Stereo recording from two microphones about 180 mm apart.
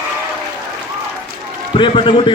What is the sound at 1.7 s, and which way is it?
Speech, 25° left (ahead or behind).